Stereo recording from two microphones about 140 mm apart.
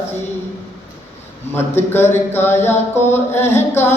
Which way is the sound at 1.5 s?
15° left (ahead or behind).